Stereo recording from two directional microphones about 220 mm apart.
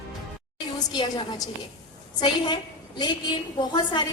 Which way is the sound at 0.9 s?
20° left (ahead or behind).